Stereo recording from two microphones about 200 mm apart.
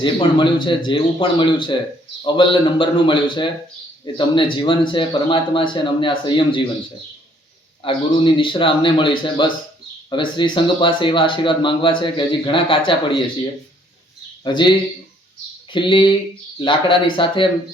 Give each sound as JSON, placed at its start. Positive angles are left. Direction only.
{"t": 0.0, "sound": "speech", "side_deg": 25}
{"t": 7.8, "sound": "speech", "side_deg": 25}
{"t": 14.4, "sound": "speech", "side_deg": 25}
{"t": 15.7, "sound": "speech", "side_deg": 25}